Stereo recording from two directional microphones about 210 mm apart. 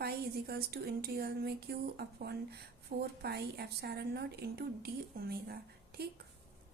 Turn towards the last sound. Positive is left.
turn(degrees=-50)  # may be behind; listen again after turning